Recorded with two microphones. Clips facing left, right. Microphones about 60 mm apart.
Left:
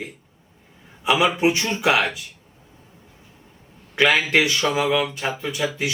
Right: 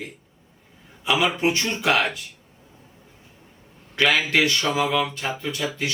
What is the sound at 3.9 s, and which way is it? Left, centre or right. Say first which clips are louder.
A man's voice: left 2 dB; centre.